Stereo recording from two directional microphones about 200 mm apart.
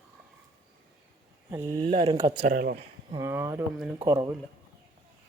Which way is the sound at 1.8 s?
25° right (ahead or behind).